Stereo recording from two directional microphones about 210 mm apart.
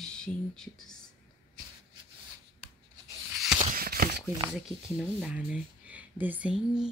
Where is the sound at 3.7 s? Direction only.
45° right (ahead or behind).